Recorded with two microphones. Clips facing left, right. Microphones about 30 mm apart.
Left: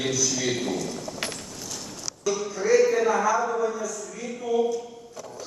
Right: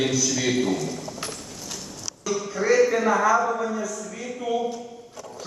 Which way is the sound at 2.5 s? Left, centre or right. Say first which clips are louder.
Right 1 dB; right.